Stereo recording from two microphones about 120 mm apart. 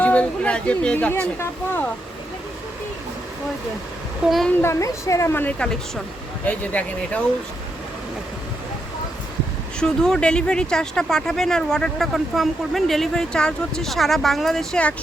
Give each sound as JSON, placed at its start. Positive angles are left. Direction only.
{"t": 0.0, "sound": "speech", "side_deg": 10}
{"t": 4.3, "sound": "speech", "side_deg": 0}
{"t": 4.5, "sound": "a woman's voice", "side_deg": 20}
{"t": 9.8, "sound": "speech", "side_deg": 5}